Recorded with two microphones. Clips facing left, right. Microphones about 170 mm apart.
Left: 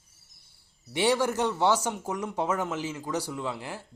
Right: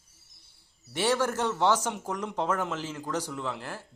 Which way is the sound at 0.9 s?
15° left (ahead or behind).